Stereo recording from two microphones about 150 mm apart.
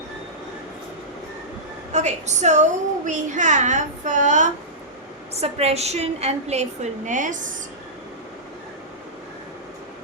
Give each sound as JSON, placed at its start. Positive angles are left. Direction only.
{"t": 1.9, "sound": "a woman's voice", "side_deg": -50}
{"t": 5.3, "sound": "a woman's voice", "side_deg": -45}